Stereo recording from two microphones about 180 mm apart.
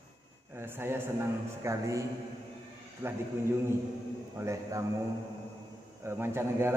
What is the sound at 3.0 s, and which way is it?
Speech, 15° right (ahead or behind).